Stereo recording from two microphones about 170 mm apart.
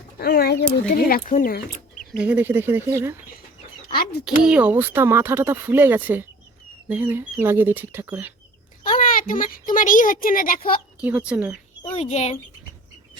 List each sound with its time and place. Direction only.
0.2 s speech: 65° left (ahead or behind)
2.1 s speech: 10° right (ahead or behind)
4.3 s speech: 5° right (ahead or behind)
8.8 s a sound: 50° left (ahead or behind)
9.7 s speech: 50° left (ahead or behind)
11.0 s speech: 5° right (ahead or behind)
11.9 s speech: 40° left (ahead or behind)